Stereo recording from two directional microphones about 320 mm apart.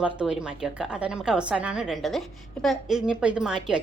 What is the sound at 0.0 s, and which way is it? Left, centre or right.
A woman's voice, centre.